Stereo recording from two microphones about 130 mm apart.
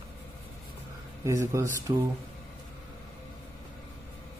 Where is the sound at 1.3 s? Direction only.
25° right (ahead or behind).